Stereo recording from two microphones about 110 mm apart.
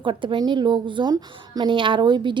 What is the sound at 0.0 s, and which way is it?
A woman's voice, 50° right (ahead or behind).